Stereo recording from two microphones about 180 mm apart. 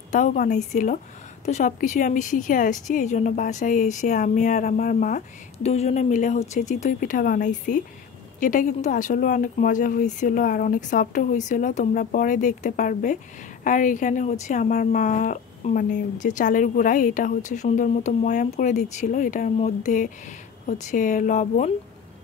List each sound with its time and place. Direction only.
0.1 s speech: 45° left (ahead or behind)